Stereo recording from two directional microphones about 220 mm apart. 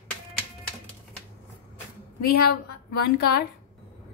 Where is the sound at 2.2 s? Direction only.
45° left (ahead or behind).